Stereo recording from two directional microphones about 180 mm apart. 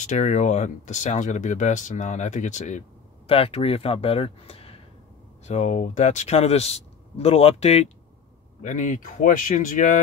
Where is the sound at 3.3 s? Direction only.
30° left (ahead or behind).